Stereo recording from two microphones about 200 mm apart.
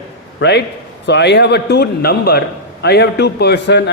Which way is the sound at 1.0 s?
60° left (ahead or behind).